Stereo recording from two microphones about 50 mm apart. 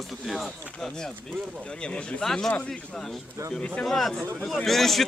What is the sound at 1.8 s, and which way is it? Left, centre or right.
Speech, left.